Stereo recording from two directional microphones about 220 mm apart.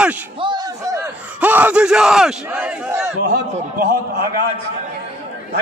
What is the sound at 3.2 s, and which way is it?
A man's voice, 40° right (ahead or behind).